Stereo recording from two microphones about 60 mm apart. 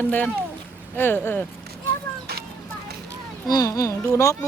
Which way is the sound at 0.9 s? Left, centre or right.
Left.